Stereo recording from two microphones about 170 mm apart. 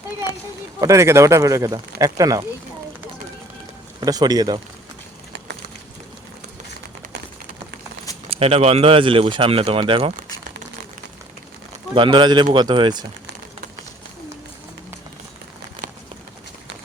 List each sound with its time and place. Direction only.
0.8 s speech: 20° right (ahead or behind)
4.0 s speech: 20° right (ahead or behind)
8.3 s speech: 35° right (ahead or behind)
11.9 s speech: 30° right (ahead or behind)
15.8 s a sound: 50° right (ahead or behind)